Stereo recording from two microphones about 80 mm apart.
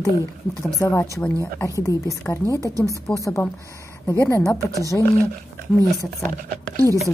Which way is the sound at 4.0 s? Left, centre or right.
Left.